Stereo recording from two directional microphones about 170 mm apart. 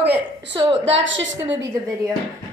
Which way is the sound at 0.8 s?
90° right.